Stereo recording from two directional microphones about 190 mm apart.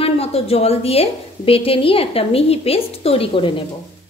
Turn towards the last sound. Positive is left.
turn(degrees=30)  # may be behind; listen again after turning